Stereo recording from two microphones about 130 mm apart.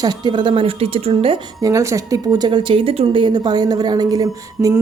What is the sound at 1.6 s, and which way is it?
Speech, 25° right (ahead or behind).